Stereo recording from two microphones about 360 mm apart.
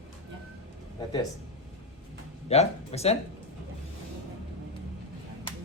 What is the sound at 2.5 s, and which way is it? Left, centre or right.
Speech, centre.